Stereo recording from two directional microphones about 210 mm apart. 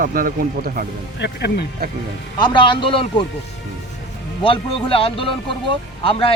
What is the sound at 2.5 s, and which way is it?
Speech, 25° left (ahead or behind).